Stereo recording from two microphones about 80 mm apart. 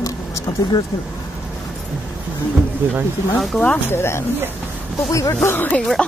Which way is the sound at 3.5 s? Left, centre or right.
Centre.